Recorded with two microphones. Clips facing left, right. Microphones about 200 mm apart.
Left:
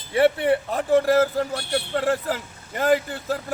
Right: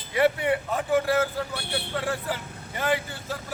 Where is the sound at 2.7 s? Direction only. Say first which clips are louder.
Left 6 dB; 45° left (ahead or behind).